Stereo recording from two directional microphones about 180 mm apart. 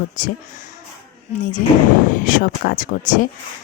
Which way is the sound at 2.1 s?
50° left (ahead or behind).